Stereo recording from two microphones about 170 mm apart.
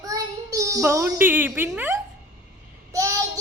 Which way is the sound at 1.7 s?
10° right (ahead or behind).